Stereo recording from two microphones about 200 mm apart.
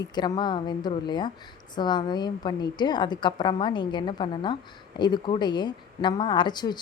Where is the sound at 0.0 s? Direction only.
20° left (ahead or behind).